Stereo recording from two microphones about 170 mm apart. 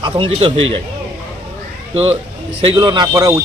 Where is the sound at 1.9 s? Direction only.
35° right (ahead or behind); by 3.4 s 20° right (ahead or behind).